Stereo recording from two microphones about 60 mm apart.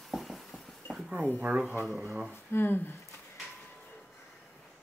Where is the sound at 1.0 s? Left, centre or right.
Centre.